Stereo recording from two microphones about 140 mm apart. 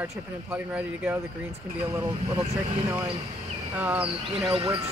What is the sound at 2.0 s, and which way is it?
Speech, 25° right (ahead or behind).